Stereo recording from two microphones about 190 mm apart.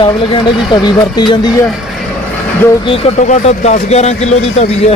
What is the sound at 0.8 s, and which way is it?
Speech, 25° left (ahead or behind).